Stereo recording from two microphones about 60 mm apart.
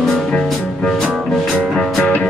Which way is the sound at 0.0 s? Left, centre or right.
Centre.